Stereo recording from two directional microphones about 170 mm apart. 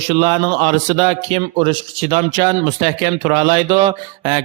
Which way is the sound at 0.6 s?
40° right (ahead or behind).